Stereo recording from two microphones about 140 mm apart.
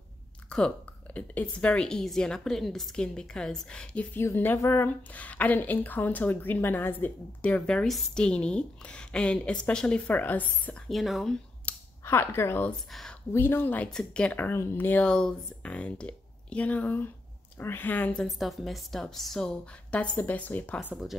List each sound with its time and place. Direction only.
0.5 s a woman's voice: 10° left (ahead or behind)
12.0 s a woman's voice: 20° left (ahead or behind)
18.2 s a woman's voice: centre (ahead or behind)
20.9 s a woman's voice: centre (ahead or behind)